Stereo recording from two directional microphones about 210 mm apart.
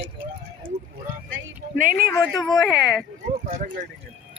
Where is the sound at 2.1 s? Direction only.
15° left (ahead or behind).